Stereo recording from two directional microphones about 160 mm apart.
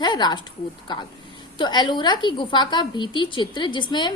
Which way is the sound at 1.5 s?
30° left (ahead or behind).